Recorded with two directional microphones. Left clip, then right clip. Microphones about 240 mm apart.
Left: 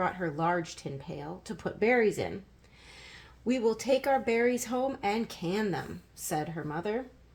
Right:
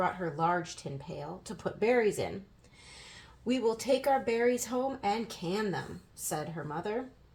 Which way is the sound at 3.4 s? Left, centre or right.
Left.